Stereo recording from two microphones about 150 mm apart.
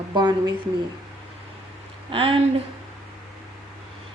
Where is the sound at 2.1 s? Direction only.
35° right (ahead or behind).